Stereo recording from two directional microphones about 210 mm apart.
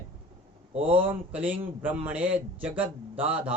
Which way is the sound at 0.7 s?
25° right (ahead or behind).